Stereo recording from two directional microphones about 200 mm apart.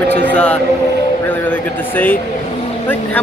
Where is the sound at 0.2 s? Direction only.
5° left (ahead or behind).